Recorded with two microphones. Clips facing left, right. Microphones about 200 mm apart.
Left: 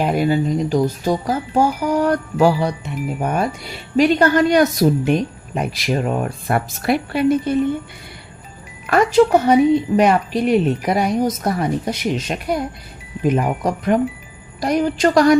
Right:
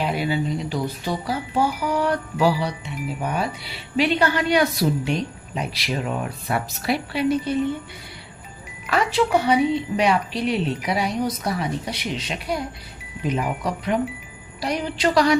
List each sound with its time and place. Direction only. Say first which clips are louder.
0.0 s speech: left 6 dB; 45° left (ahead or behind)
8.9 s speech: left 7 dB; 45° left (ahead or behind)